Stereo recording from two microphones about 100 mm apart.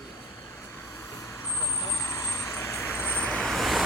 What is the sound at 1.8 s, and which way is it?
Vehicle, 35° left (ahead or behind).